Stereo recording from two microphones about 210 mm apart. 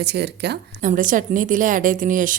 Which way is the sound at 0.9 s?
40° right (ahead or behind).